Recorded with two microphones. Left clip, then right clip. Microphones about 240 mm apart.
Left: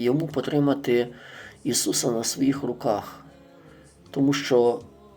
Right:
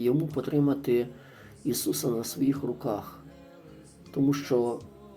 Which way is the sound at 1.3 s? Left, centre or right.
Centre.